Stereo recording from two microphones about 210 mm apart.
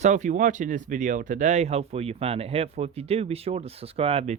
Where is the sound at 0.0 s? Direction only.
35° right (ahead or behind).